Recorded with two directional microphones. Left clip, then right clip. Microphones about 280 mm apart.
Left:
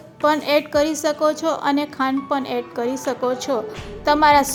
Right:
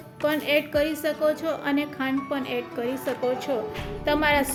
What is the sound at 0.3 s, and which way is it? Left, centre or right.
A woman's voice, centre.